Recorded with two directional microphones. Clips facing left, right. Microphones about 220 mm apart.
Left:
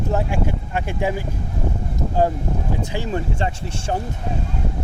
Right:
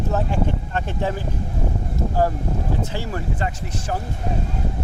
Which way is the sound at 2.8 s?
15° left (ahead or behind).